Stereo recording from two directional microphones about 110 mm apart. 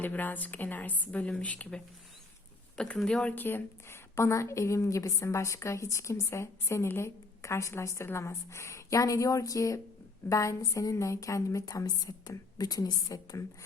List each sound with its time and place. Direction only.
0.0 s a woman's voice: 15° left (ahead or behind); by 13.7 s 30° left (ahead or behind)